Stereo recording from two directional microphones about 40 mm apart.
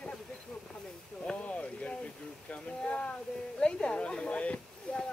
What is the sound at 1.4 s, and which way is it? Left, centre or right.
Speech, left.